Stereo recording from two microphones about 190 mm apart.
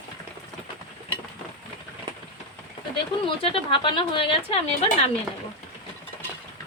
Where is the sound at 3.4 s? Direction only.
25° left (ahead or behind).